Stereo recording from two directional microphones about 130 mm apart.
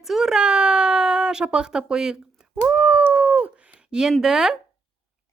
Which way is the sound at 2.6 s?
10° right (ahead or behind).